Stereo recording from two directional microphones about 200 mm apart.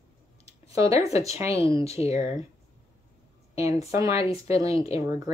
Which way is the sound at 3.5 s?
15° right (ahead or behind).